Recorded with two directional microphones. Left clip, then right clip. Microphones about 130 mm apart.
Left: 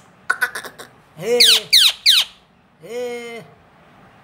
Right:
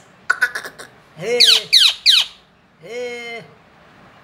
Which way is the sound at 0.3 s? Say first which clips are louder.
Right 2 dB; 20° left (ahead or behind).